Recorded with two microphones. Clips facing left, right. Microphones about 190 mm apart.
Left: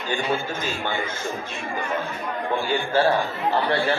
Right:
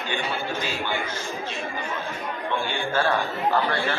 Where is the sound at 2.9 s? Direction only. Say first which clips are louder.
Left 3 dB; 30° left (ahead or behind).